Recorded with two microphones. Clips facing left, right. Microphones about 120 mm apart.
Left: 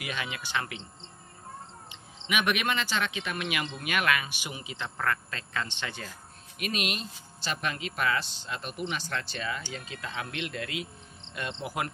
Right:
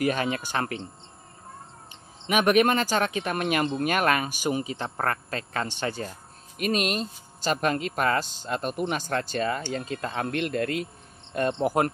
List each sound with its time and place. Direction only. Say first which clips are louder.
0.0 s speech: right 11 dB; 45° right (ahead or behind)
1.9 s speech: right 5 dB; 40° right (ahead or behind)